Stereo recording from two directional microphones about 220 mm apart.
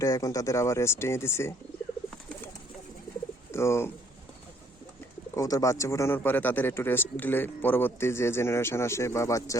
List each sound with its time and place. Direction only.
0.0 s a man's voice: 15° left (ahead or behind)
3.5 s speech: 10° left (ahead or behind)
5.4 s a man's voice: 15° left (ahead or behind)